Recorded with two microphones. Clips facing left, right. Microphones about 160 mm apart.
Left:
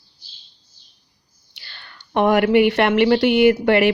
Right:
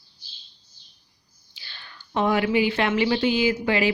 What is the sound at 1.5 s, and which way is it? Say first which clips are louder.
A woman's voice: left 1 dB; 70° left (ahead or behind).